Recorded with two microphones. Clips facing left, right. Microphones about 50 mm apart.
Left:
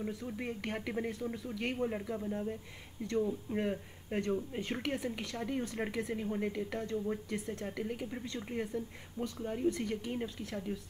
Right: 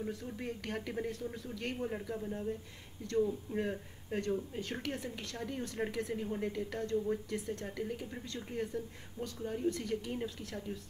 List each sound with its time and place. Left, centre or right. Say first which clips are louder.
0.0 s speech: left 1 dB; centre